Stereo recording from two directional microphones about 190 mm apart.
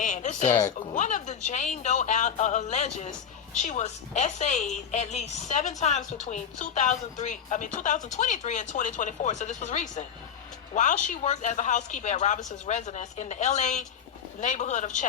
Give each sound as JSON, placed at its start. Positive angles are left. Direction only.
{"t": 0.0, "sound": "a woman's voice", "side_deg": 40}